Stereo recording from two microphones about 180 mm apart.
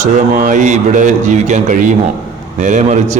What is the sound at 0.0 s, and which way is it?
A man's voice, 45° right (ahead or behind).